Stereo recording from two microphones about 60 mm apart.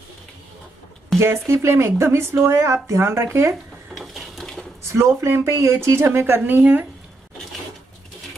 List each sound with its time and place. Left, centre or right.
1.1 s speech: centre
1.5 s speech: right
3.9 s a sound: centre
4.8 s speech: right